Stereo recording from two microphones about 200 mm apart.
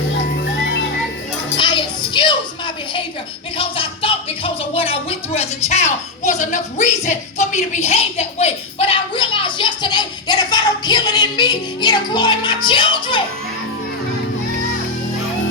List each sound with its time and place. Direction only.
0.3 s music: 55° left (ahead or behind)
1.5 s music: 25° left (ahead or behind)
3.6 s speech: 25° left (ahead or behind)